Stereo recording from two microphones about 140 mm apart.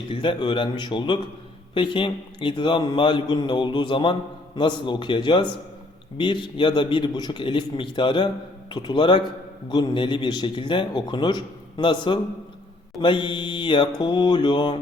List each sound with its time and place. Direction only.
0.1 s a man's voice: 35° left (ahead or behind)